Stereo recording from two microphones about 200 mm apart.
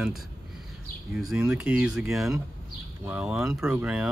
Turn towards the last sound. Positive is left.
turn(degrees=-5)  # may be behind; listen again after turning